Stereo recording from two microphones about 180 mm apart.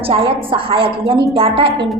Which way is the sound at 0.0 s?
30° right (ahead or behind).